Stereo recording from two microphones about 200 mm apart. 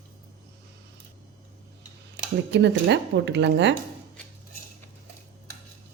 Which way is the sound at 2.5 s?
60° right (ahead or behind).